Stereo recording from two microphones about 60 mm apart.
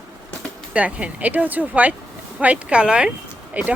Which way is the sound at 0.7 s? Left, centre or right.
Right.